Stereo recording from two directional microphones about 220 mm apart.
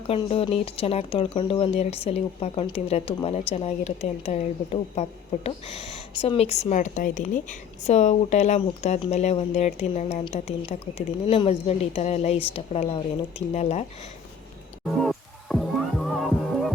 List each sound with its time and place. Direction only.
0.1 s speech: 25° left (ahead or behind)
15.0 s music: centre (ahead or behind)